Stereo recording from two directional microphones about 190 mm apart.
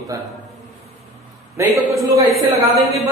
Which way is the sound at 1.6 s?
15° right (ahead or behind).